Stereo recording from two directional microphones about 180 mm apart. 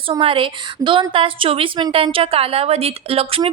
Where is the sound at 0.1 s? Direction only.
30° right (ahead or behind).